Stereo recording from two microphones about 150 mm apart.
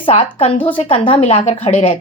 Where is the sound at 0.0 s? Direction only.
40° left (ahead or behind).